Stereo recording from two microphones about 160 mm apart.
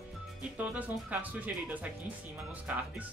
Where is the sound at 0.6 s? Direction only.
10° right (ahead or behind).